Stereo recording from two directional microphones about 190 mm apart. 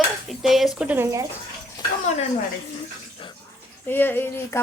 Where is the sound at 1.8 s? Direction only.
20° left (ahead or behind).